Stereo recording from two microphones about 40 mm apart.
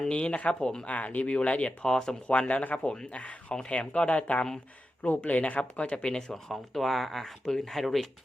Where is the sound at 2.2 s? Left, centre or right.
Left.